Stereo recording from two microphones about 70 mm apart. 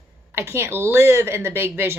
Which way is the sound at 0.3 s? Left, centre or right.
Right.